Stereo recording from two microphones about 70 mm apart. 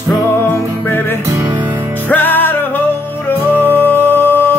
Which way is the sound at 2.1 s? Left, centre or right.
Left.